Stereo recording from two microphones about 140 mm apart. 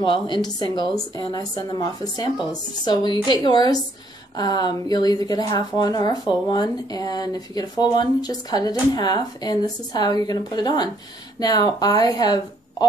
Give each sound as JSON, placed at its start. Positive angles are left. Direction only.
{"t": 0.0, "sound": "speech", "side_deg": 35}